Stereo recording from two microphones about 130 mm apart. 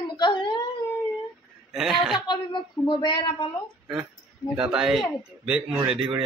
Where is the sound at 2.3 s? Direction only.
35° left (ahead or behind).